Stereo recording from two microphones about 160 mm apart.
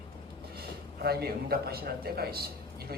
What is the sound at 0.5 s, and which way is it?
A man's voice, 80° right.